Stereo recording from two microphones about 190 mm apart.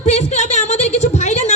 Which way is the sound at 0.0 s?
35° left (ahead or behind).